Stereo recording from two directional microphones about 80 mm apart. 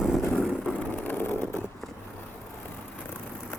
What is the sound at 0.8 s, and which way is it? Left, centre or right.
Vehicle, centre.